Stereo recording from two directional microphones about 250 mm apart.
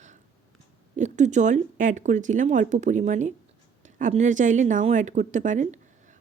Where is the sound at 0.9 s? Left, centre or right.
Right.